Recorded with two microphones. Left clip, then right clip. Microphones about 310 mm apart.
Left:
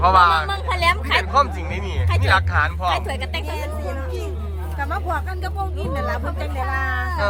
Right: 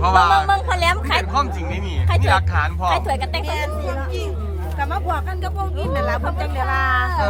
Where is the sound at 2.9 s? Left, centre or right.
Right.